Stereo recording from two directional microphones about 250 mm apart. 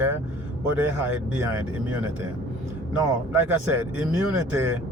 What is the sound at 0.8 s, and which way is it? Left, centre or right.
Speech, centre.